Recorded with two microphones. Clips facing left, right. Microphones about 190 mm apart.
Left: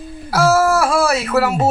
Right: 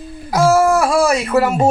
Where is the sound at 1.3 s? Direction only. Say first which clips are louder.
Right 2 dB; 10° right (ahead or behind).